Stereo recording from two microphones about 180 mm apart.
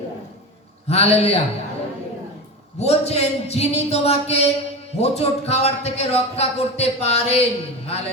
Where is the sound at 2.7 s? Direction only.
35° left (ahead or behind).